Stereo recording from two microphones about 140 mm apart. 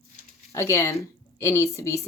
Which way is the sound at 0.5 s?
20° left (ahead or behind).